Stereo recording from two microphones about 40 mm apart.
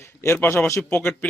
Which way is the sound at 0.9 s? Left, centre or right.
Left.